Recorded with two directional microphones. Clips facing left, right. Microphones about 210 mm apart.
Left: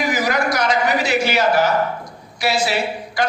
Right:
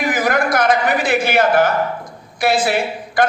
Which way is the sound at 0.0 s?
55° right (ahead or behind).